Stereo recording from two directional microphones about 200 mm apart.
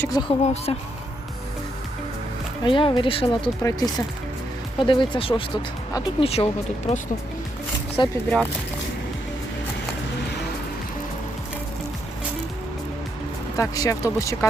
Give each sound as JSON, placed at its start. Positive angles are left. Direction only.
{"t": 0.0, "sound": "speech", "side_deg": 20}
{"t": 0.4, "sound": "speech", "side_deg": 30}
{"t": 2.6, "sound": "speech", "side_deg": 25}
{"t": 13.6, "sound": "speech", "side_deg": 15}